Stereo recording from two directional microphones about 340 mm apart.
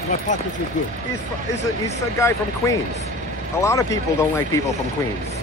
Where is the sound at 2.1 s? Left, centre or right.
Centre.